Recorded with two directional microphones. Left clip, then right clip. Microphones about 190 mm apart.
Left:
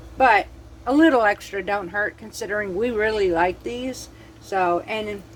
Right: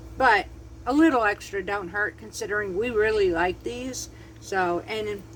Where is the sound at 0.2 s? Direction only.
15° left (ahead or behind).